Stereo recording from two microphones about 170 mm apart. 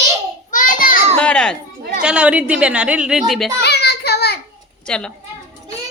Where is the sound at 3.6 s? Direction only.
75° left (ahead or behind).